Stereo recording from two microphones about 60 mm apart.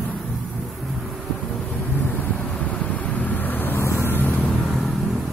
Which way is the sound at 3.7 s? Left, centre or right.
Left.